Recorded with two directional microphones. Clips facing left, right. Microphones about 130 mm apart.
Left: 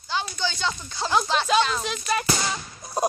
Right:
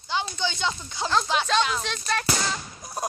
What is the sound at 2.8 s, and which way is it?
Music, 20° left (ahead or behind).